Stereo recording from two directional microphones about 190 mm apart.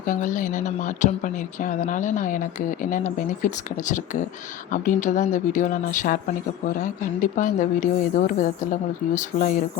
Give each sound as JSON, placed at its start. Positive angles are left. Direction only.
{"t": 0.0, "sound": "speech", "side_deg": 45}